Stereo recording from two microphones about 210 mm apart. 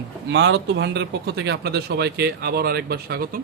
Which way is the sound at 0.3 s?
55° right (ahead or behind).